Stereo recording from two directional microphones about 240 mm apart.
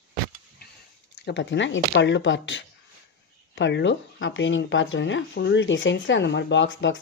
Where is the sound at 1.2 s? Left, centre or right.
Left.